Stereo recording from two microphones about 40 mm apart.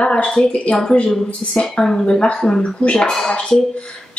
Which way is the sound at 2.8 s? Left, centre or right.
Left.